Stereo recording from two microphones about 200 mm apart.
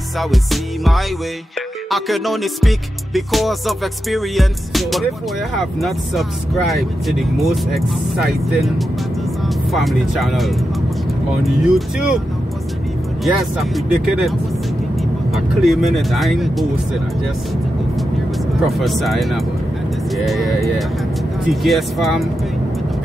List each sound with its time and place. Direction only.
0.2 s speech: centre (ahead or behind)
13.2 s speech: centre (ahead or behind)
18.7 s speech: centre (ahead or behind)